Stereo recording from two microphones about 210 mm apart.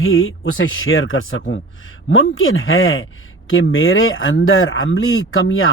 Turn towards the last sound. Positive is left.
turn(degrees=75)  # may be behind; listen again after turning